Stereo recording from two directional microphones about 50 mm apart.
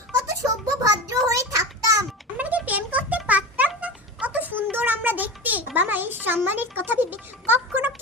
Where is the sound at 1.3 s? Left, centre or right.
Right.